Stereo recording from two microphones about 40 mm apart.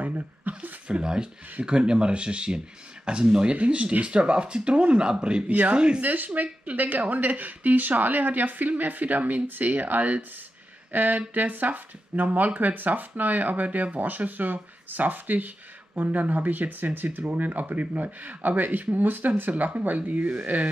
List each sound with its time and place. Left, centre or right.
0.0 s a sound: right
0.8 s speech: right
6.0 s speech: right